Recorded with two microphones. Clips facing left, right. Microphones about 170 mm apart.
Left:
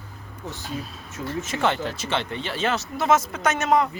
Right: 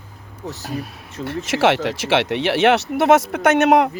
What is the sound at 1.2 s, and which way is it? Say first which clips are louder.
Speech: right 7 dB; 80° right.